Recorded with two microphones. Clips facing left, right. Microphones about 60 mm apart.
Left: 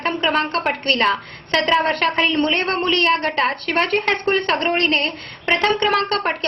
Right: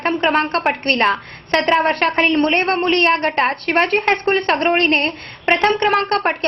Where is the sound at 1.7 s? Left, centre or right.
Right.